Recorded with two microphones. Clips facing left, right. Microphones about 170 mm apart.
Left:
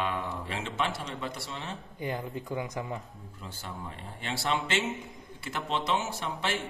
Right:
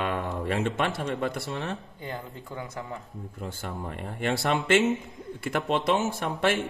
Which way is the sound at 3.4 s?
55° right (ahead or behind).